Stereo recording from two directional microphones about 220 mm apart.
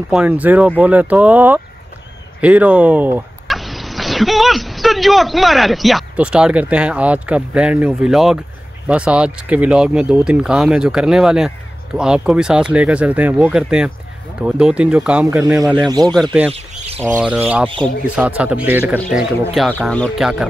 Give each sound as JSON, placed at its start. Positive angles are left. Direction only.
{"t": 0.1, "sound": "speech", "side_deg": -5}
{"t": 17.2, "sound": "speech", "side_deg": -5}